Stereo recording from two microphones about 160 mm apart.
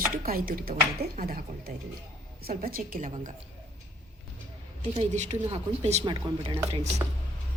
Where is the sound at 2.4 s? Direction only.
65° right (ahead or behind).